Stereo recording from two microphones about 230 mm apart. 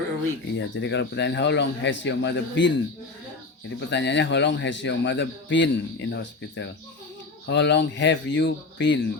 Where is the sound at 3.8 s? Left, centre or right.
Left.